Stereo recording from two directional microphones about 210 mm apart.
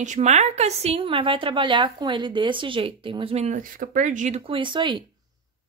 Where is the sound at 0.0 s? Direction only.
35° right (ahead or behind).